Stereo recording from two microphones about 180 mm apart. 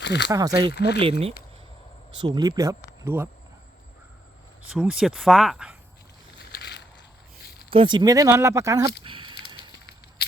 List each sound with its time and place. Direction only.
0.0 s speech: 75° left (ahead or behind)
0.3 s speech: 20° right (ahead or behind)
0.7 s speech: 65° left (ahead or behind)
2.1 s speech: 25° right (ahead or behind)
4.7 s speech: 5° right (ahead or behind)
6.5 s a sound: 70° left (ahead or behind)
7.7 s speech: 30° right (ahead or behind)
9.0 s a sound: 30° right (ahead or behind)